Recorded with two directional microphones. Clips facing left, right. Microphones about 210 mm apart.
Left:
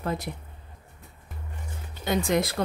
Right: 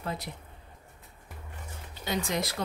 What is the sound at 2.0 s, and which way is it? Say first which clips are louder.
Speech: left 6 dB; 55° left (ahead or behind).